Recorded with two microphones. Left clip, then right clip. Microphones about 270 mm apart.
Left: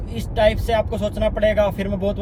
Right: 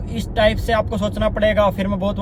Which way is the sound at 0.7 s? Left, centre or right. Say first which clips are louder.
Right 1 dB; centre.